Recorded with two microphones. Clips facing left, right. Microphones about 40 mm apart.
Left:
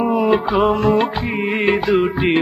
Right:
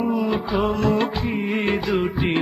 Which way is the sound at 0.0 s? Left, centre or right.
Left.